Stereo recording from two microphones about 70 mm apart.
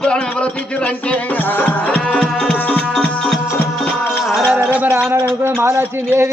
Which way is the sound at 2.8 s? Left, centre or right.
Centre.